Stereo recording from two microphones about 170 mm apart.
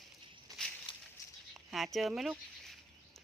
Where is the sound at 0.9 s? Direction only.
30° left (ahead or behind).